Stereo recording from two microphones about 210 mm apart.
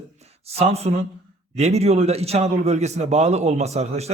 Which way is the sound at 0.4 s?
30° right (ahead or behind).